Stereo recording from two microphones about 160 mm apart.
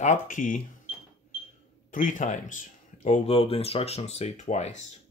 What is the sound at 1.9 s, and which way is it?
Speech, 55° left (ahead or behind).